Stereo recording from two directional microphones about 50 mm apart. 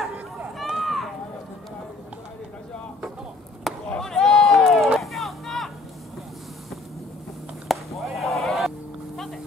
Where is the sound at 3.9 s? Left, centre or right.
Centre.